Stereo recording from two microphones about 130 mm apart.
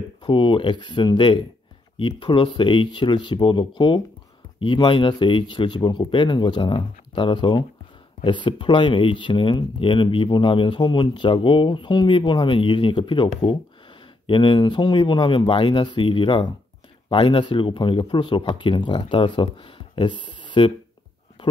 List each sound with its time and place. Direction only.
0.2 s speech: 40° left (ahead or behind)